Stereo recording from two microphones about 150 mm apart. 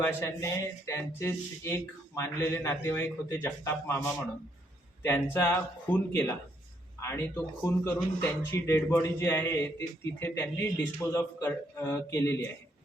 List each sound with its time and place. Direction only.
0.0 s speech: 15° left (ahead or behind)